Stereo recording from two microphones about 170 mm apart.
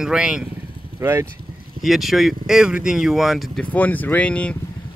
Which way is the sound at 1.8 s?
Centre (ahead or behind).